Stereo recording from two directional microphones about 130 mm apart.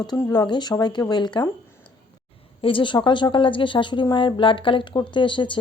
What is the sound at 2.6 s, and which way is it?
Speech, 40° left (ahead or behind).